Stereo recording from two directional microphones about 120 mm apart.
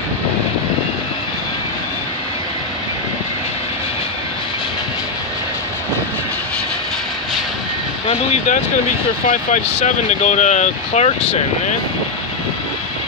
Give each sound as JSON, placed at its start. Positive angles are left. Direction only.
{"t": 8.1, "sound": "speech", "side_deg": 65}
{"t": 9.3, "sound": "speech", "side_deg": 90}